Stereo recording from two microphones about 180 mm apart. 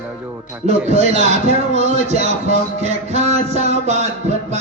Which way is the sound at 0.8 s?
35° right (ahead or behind).